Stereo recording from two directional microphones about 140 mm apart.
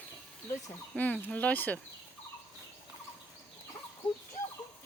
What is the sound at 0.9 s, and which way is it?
Speech, 10° left (ahead or behind).